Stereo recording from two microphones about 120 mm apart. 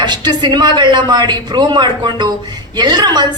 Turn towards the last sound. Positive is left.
turn(degrees=-35)  # may be behind; listen again after turning